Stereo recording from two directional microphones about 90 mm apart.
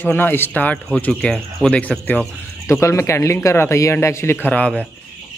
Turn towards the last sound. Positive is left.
turn(degrees=15)  # may be behind; listen again after turning